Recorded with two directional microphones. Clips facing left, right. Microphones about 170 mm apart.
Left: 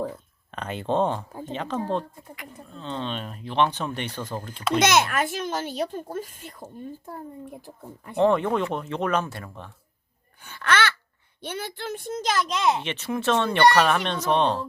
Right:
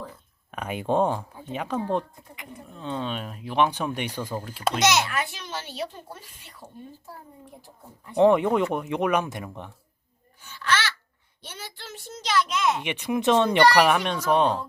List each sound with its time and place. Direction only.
0.5 s speech: 10° right (ahead or behind)
1.3 s speech: 45° left (ahead or behind)
1.5 s speech: 10° right (ahead or behind)
4.8 s a child's voice: 55° left (ahead or behind)
8.1 s speech: 15° right (ahead or behind)
10.4 s babbling: 55° left (ahead or behind)
11.4 s a child's voice: 60° left (ahead or behind); by 12.5 s 45° left (ahead or behind)
12.8 s speech: 15° right (ahead or behind)